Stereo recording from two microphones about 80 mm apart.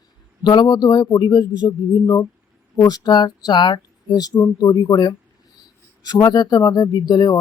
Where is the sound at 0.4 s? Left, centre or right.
Left.